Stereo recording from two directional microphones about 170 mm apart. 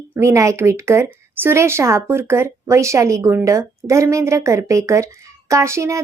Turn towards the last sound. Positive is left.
turn(degrees=-15)  # may be behind; listen again after turning